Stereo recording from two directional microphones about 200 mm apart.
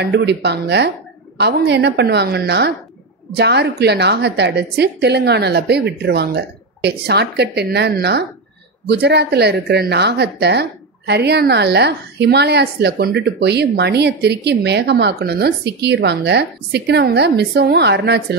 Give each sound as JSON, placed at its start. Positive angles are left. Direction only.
{"t": 0.0, "sound": "speech", "side_deg": -55}